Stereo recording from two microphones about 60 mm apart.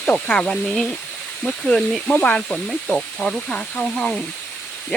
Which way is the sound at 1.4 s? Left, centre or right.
Centre.